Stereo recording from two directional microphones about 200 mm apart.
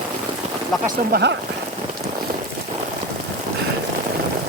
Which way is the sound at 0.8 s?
55° right (ahead or behind).